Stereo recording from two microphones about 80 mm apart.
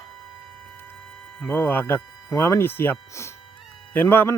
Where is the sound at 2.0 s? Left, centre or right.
Centre.